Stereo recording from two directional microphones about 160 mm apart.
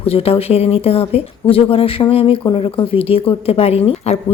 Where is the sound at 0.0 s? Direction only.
40° left (ahead or behind).